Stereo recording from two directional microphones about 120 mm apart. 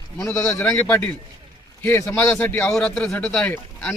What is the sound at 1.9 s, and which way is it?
Speech, 20° left (ahead or behind).